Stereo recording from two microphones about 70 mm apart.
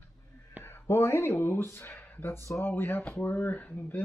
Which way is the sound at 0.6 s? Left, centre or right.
Left.